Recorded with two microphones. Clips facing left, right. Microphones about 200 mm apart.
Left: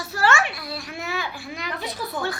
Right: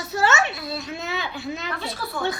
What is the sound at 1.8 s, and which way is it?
Speech, 20° left (ahead or behind).